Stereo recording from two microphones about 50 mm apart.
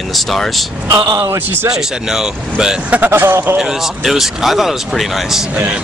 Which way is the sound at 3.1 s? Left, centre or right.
Right.